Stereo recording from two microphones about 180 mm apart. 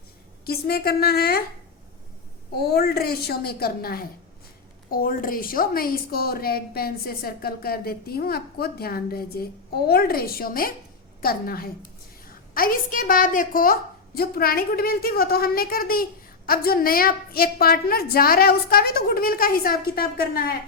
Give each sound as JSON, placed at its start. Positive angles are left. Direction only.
{"t": 0.4, "sound": "a woman's voice", "side_deg": 60}
{"t": 2.5, "sound": "a woman's voice", "side_deg": 60}